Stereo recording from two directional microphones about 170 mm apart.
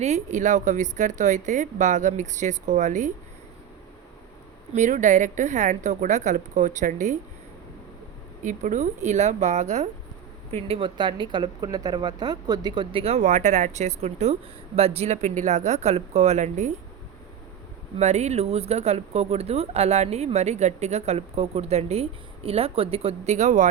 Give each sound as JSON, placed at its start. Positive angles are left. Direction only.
{"t": 0.0, "sound": "a woman's voice", "side_deg": -45}
{"t": 4.7, "sound": "a woman's voice", "side_deg": -45}
{"t": 8.4, "sound": "a woman's voice", "side_deg": -45}
{"t": 10.7, "sound": "a woman's voice", "side_deg": -30}
{"t": 17.9, "sound": "speech", "side_deg": -40}